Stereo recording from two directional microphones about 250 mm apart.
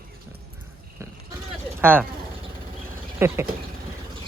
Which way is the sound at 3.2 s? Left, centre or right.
Centre.